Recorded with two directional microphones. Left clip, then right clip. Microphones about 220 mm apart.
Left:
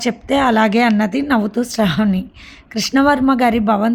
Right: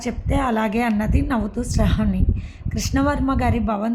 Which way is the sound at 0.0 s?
30° left (ahead or behind).